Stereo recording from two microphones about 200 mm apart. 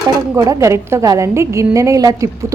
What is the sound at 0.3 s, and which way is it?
A woman's voice, 15° right (ahead or behind).